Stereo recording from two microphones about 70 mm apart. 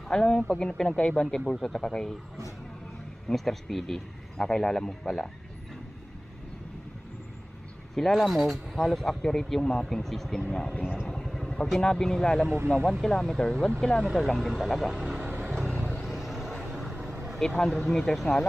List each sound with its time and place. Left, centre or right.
0.1 s a man's voice: centre
3.3 s a man's voice: centre
7.9 s a man's voice: centre
10.7 s speech: left
11.1 s vehicle: centre
11.5 s a man's voice: centre
14.0 s a man's voice: centre
15.2 s vehicle: right
16.1 s vehicle: centre
17.6 s a man's voice: centre